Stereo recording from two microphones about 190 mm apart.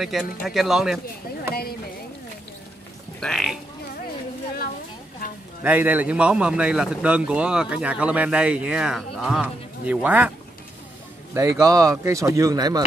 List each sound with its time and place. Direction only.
0.0 s a man's voice: 5° right (ahead or behind)
1.5 s speech: 55° left (ahead or behind)
3.2 s a man's voice: centre (ahead or behind)
5.6 s a man's voice: 10° right (ahead or behind)
11.3 s speech: 15° right (ahead or behind)